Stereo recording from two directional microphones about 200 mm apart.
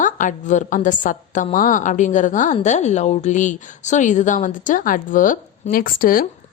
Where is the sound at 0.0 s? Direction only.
40° left (ahead or behind).